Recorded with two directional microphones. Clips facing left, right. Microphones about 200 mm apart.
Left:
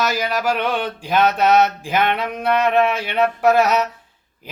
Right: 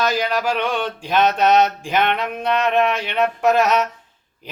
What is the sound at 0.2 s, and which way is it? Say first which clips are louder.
Mantra: even; 10° left (ahead or behind).